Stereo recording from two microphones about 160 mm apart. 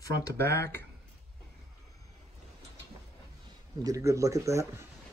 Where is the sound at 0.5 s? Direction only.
15° left (ahead or behind).